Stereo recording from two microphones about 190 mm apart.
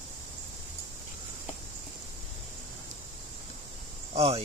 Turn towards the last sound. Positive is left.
turn(degrees=-30)  # may be behind; listen again after turning